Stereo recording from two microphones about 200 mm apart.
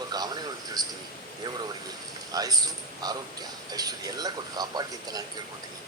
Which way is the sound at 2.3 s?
20° right (ahead or behind).